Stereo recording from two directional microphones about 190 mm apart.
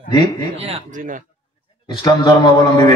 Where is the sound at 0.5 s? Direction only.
35° right (ahead or behind).